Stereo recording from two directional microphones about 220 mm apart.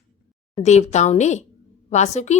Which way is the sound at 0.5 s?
30° left (ahead or behind).